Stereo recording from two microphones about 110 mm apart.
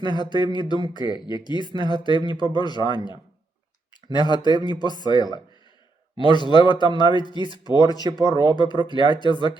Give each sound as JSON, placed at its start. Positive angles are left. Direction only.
{"t": 0.2, "sound": "speech", "side_deg": 40}